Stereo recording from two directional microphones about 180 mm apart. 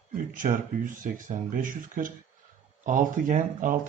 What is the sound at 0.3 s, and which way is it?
Speech, 45° right (ahead or behind).